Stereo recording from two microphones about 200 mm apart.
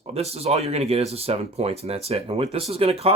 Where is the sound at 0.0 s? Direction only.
30° right (ahead or behind).